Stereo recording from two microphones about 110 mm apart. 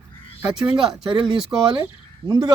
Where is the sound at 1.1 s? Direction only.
50° right (ahead or behind).